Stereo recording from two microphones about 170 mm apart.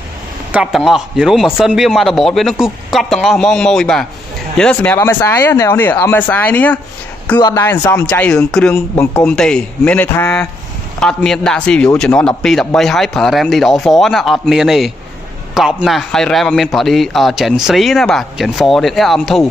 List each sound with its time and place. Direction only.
0.5 s a man's voice: 5° right (ahead or behind)
7.3 s speech: 25° left (ahead or behind)
7.8 s speech: 15° left (ahead or behind)
8.7 s a man's voice: 15° left (ahead or behind)